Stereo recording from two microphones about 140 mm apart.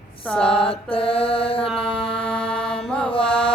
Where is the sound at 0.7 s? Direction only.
40° left (ahead or behind).